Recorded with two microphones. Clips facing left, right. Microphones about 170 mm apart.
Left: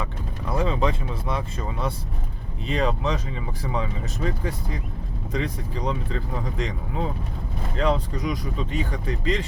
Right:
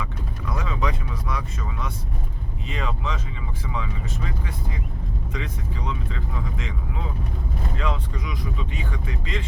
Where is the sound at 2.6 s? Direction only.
35° left (ahead or behind).